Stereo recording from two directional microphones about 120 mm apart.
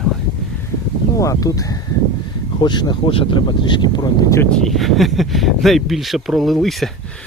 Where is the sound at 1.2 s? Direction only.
30° left (ahead or behind).